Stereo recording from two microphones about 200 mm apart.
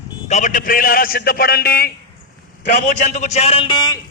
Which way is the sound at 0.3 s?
35° left (ahead or behind).